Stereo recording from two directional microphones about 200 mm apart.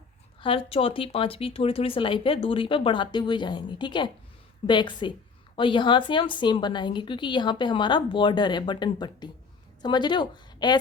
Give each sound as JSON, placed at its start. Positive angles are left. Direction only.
{"t": 0.4, "sound": "a woman's voice", "side_deg": 30}